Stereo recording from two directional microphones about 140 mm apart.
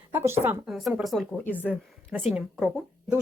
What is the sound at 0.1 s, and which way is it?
Speech, 15° right (ahead or behind).